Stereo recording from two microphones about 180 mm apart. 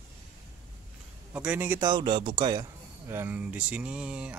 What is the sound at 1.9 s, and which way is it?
Speech, 25° right (ahead or behind).